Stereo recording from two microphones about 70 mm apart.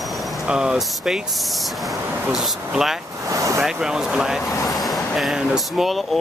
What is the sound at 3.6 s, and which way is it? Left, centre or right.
Speech, centre.